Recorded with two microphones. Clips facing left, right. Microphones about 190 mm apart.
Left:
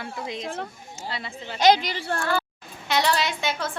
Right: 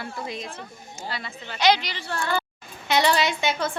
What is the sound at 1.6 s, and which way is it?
Speech, 45° left (ahead or behind).